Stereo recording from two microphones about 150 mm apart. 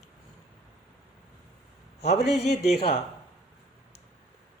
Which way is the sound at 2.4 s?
90° left.